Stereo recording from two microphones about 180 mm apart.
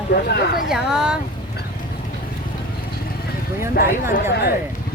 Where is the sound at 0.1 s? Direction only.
55° left (ahead or behind).